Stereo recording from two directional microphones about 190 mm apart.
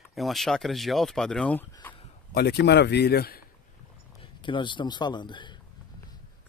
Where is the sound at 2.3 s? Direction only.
60° left (ahead or behind).